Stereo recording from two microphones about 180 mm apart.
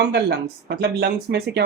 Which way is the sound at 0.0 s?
70° right (ahead or behind).